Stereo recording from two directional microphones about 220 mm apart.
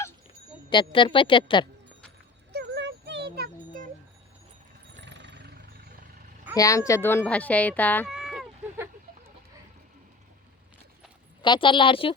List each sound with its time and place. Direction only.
0.7 s speech: 20° left (ahead or behind)
2.5 s a sound: 50° right (ahead or behind)
4.9 s vehicle: 55° right (ahead or behind)
6.6 s a child's voice: 15° left (ahead or behind)
8.1 s cat: centre (ahead or behind)
11.4 s speech: 20° left (ahead or behind)